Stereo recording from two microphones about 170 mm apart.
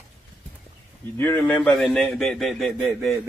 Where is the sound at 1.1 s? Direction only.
10° left (ahead or behind).